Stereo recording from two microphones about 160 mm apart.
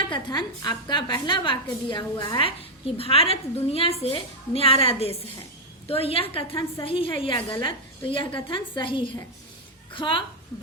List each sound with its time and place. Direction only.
0.1 s a woman's voice: 25° left (ahead or behind)